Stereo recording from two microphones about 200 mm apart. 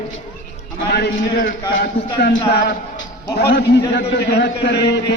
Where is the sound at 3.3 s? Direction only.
55° left (ahead or behind).